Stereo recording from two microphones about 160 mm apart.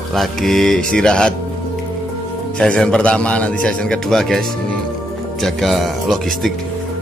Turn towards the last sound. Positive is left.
turn(degrees=0)  # may be behind; listen again after turning